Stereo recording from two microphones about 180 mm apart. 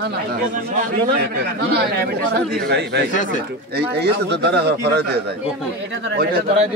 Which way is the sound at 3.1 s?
45° left (ahead or behind).